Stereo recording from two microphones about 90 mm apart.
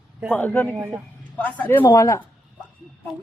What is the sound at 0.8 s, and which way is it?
Speech, 20° right (ahead or behind).